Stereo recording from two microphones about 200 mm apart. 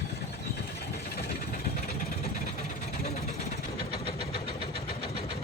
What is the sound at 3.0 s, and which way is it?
Vehicle, 30° left (ahead or behind).